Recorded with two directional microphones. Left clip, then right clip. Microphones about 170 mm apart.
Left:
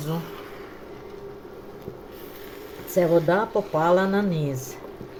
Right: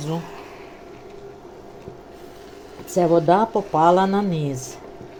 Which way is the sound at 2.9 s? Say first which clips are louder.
Right 3 dB; 30° right (ahead or behind).